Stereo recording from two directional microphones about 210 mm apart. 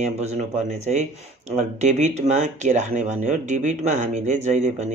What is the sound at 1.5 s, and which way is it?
Speech, 35° right (ahead or behind).